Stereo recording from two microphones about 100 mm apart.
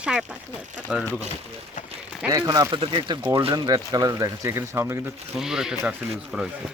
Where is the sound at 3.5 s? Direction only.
40° right (ahead or behind); by 5.0 s 25° right (ahead or behind).